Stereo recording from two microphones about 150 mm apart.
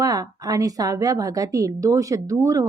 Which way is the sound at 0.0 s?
25° right (ahead or behind).